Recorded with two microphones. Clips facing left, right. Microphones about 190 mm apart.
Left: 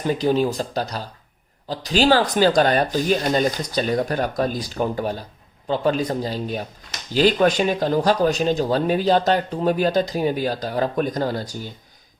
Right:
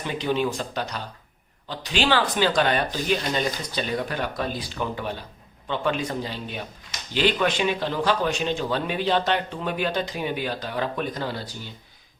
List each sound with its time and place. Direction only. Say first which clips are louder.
0.0 s speech: left 5 dB; 40° left (ahead or behind)